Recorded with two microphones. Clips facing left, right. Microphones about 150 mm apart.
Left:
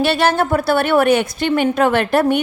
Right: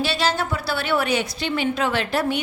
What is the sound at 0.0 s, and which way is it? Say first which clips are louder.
A woman's voice: left 7 dB; 55° left (ahead or behind).